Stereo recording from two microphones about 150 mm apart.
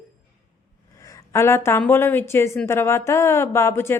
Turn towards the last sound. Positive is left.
turn(degrees=15)  # may be behind; listen again after turning